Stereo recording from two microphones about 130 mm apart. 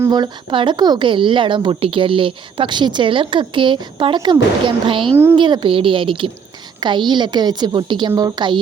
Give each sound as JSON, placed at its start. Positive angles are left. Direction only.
{"t": 0.1, "sound": "speech", "side_deg": -35}